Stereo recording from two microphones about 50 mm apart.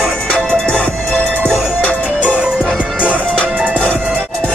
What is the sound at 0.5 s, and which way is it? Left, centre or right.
Music, left.